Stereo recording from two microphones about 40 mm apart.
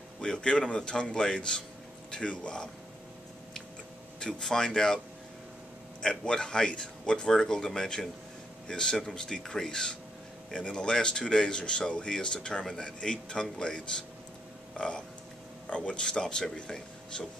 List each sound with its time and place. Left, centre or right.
0.2 s speech: left
4.2 s speech: centre
6.0 s speech: centre